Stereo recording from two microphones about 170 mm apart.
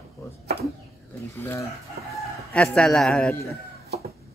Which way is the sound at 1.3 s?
15° left (ahead or behind).